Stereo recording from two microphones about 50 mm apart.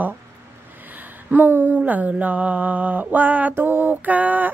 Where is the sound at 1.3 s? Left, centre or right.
Right.